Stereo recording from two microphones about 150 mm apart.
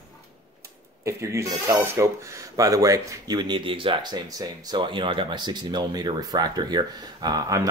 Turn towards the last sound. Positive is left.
turn(degrees=-25)  # may be behind; listen again after turning